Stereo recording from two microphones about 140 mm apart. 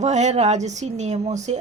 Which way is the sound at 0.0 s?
55° right (ahead or behind).